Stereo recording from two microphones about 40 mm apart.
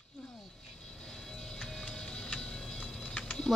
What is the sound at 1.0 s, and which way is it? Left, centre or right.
Music, centre.